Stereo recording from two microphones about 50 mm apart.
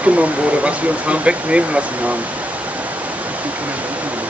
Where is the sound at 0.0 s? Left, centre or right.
Right.